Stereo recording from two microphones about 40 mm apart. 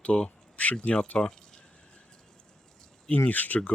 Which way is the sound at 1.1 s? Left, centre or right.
Centre.